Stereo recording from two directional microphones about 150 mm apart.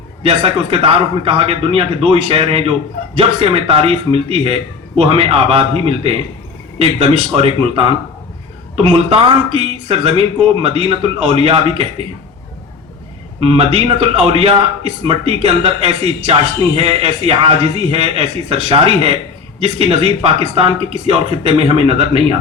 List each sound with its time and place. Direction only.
0.2 s speech: 40° right (ahead or behind)
13.4 s speech: 40° right (ahead or behind)